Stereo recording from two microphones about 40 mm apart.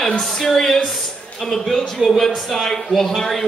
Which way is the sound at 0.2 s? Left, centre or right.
Centre.